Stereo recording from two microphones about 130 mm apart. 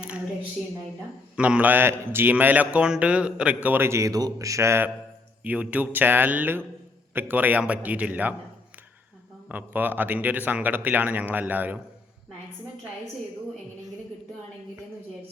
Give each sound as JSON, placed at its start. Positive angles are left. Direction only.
{"t": 1.4, "sound": "a man's voice", "side_deg": -10}
{"t": 9.5, "sound": "a man's voice", "side_deg": -15}